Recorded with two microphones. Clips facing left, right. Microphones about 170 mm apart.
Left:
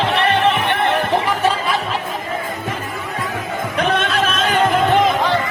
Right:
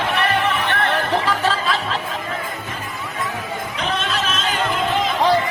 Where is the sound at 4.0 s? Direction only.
55° left (ahead or behind).